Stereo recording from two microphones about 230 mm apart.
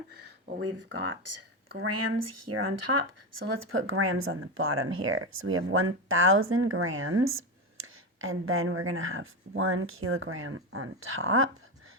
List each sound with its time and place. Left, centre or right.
0.4 s speech: right
1.9 s speech: right
2.9 s speech: right
3.3 s speech: right
8.4 s speech: right